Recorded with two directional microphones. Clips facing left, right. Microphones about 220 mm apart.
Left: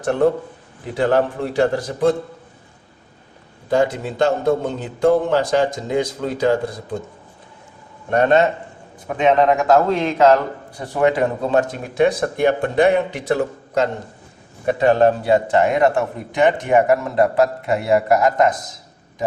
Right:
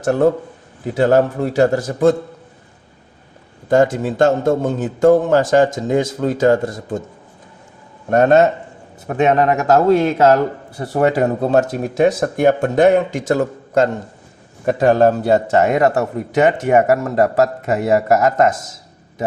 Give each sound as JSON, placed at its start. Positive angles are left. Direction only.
{"t": 0.0, "sound": "a man's voice", "side_deg": -45}
{"t": 3.7, "sound": "a man's voice", "side_deg": -45}
{"t": 8.1, "sound": "a man's voice", "side_deg": -45}
{"t": 9.6, "sound": "a man's voice", "side_deg": -40}